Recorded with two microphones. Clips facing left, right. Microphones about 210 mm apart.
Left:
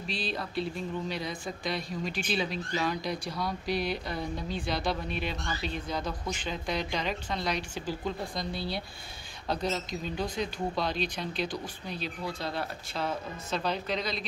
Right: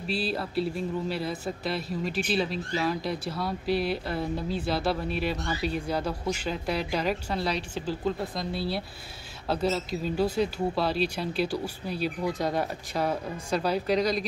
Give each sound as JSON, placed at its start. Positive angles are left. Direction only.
{"t": 0.1, "sound": "speech", "side_deg": -5}